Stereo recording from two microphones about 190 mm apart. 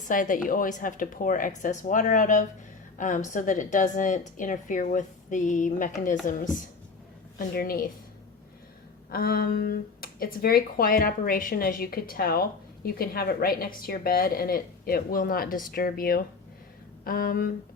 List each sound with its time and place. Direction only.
0.1 s a woman's voice: 45° left (ahead or behind)
9.1 s speech: 50° left (ahead or behind)